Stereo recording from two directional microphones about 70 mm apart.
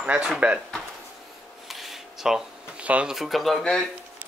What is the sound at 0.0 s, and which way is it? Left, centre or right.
Speech, right.